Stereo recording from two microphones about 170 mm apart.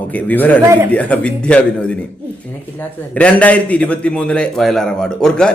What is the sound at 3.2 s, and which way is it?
Speech, 10° left (ahead or behind).